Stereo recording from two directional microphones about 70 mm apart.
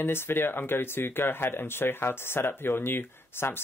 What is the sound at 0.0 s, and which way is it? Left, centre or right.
Speech, left.